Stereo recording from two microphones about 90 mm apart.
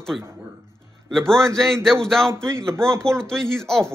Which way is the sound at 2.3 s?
30° right (ahead or behind).